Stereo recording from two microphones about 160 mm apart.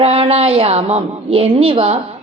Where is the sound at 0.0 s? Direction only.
40° right (ahead or behind).